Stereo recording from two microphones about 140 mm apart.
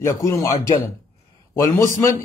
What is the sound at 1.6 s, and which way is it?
Speech, 20° left (ahead or behind).